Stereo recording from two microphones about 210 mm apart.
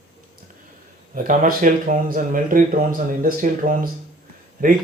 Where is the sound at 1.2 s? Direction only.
40° right (ahead or behind).